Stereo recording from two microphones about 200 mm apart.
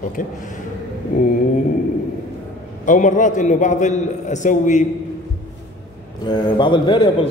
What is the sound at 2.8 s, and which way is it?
A man's voice, 40° left (ahead or behind).